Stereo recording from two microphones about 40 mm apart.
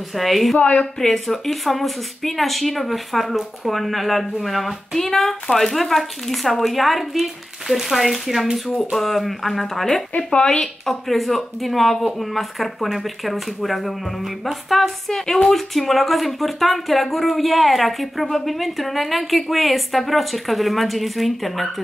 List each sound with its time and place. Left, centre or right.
0.1 s speech: centre
0.6 s a woman's voice: left
0.9 s speech: centre